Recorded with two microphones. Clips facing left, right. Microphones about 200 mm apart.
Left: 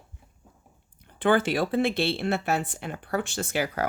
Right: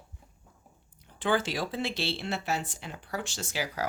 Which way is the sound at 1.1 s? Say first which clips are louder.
Left 6 dB; 55° left (ahead or behind).